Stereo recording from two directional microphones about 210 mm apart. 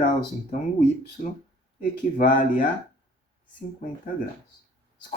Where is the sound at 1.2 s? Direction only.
40° left (ahead or behind).